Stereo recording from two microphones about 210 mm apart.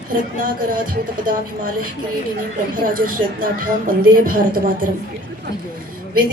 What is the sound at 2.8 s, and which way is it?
A woman's voice, 40° right (ahead or behind).